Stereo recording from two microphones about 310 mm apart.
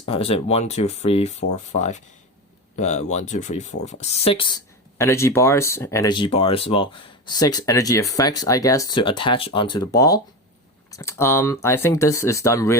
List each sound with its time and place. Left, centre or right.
0.0 s speech: centre